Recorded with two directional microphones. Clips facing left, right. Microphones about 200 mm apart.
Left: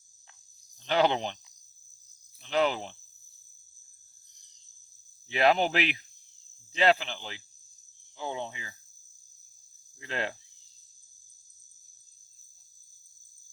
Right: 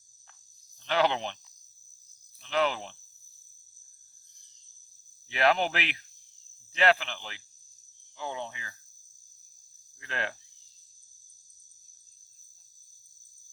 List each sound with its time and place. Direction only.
0.8 s speech: 15° left (ahead or behind)
2.4 s speech: 15° left (ahead or behind)
5.3 s speech: 20° left (ahead or behind)
10.0 s speech: 15° left (ahead or behind)